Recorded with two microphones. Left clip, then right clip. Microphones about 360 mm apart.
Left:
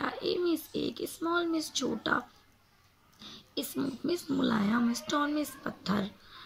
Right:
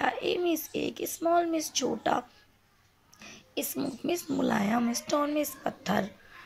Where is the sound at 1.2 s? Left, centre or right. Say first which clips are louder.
Right 5 dB; centre.